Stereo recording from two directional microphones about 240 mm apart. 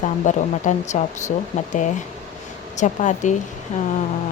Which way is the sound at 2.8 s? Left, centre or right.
Left.